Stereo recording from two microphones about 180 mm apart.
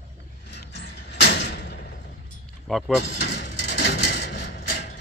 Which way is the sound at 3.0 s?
65° left (ahead or behind).